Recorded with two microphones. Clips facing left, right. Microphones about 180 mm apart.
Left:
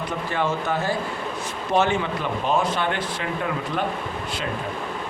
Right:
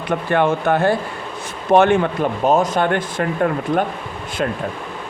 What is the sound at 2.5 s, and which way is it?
Speech, 45° right (ahead or behind).